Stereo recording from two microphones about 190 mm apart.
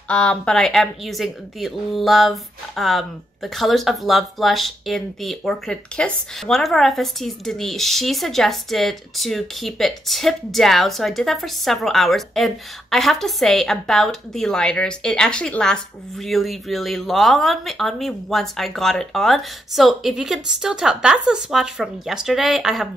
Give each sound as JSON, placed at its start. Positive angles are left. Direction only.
{"t": 0.1, "sound": "speech", "side_deg": 5}